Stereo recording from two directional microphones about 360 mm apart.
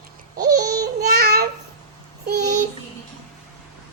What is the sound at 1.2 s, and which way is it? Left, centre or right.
Babbling, right.